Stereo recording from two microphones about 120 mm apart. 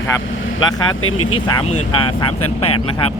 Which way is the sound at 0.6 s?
35° left (ahead or behind).